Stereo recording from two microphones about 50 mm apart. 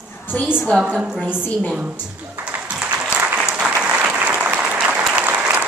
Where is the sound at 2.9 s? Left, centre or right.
Right.